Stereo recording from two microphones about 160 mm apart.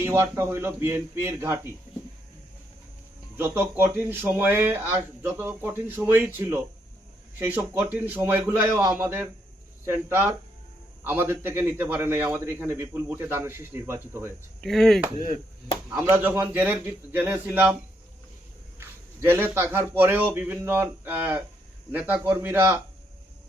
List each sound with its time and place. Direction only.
0.0 s a man's voice: 15° right (ahead or behind)
3.3 s a man's voice: 15° right (ahead or behind)
14.6 s speech: centre (ahead or behind)
16.0 s a man's voice: 10° right (ahead or behind)
18.8 s a man's voice: 15° right (ahead or behind)